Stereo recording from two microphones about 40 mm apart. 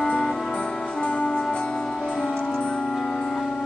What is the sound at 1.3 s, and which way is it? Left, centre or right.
Music, left.